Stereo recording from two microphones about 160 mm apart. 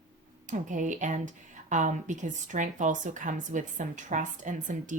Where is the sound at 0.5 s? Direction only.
50° right (ahead or behind).